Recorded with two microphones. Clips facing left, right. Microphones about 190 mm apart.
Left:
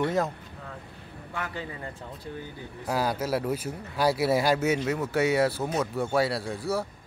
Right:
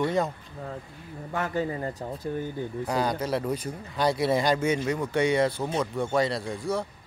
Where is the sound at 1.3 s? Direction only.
45° right (ahead or behind).